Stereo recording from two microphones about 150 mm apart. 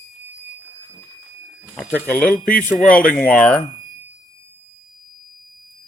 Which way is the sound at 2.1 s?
10° left (ahead or behind).